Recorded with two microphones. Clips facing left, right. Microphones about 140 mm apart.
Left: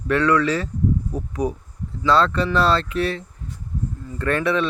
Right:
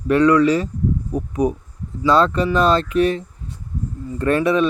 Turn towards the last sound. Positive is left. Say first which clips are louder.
# right 4 dB
turn(degrees=-15)  # may be behind; listen again after turning